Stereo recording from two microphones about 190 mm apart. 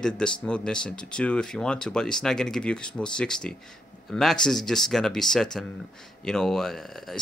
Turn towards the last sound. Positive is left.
turn(degrees=0)  # may be behind; listen again after turning